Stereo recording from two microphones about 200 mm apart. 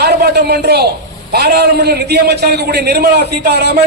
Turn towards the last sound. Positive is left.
turn(degrees=-55)  # may be behind; listen again after turning